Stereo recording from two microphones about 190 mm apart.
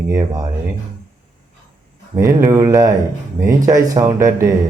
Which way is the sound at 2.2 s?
15° right (ahead or behind).